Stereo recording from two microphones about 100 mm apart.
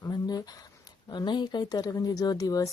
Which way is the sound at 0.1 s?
40° left (ahead or behind).